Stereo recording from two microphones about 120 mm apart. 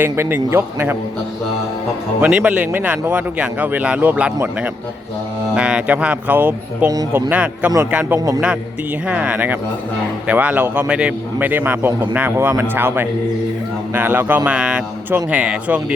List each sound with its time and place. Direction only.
0.0 s a man's voice: 15° right (ahead or behind)
2.2 s a man's voice: 15° right (ahead or behind)
5.5 s a man's voice: 10° right (ahead or behind)